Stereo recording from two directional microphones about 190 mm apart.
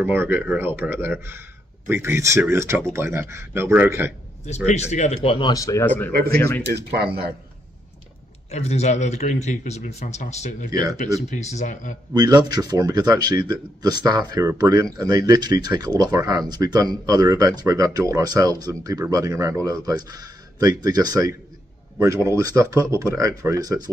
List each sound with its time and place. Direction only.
0.0 s speech: 10° right (ahead or behind)
4.5 s speech: 35° left (ahead or behind); by 6.1 s 10° left (ahead or behind)
6.6 s speech: 60° right (ahead or behind)
8.5 s a man's voice: 35° left (ahead or behind)
12.1 s speech: 20° right (ahead or behind)